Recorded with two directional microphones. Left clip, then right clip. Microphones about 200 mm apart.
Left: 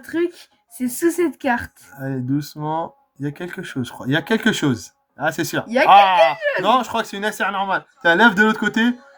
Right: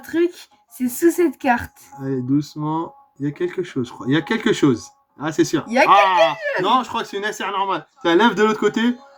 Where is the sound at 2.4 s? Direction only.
45° left (ahead or behind).